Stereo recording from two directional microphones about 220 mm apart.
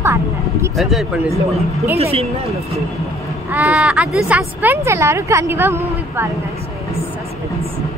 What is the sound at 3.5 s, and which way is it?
Speech, 5° right (ahead or behind).